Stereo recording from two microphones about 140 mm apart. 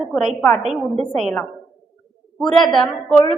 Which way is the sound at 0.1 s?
Centre (ahead or behind).